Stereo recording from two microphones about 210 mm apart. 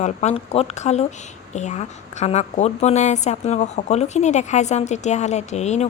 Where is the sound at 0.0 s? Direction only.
30° left (ahead or behind).